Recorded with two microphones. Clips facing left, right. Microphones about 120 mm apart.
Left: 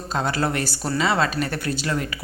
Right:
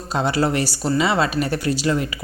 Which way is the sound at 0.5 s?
50° left (ahead or behind).